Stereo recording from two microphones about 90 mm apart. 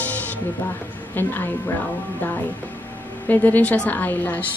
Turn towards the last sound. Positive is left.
turn(degrees=20)  # may be behind; listen again after turning